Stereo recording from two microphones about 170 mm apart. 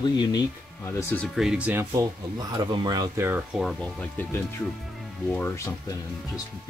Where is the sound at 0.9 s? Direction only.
15° left (ahead or behind).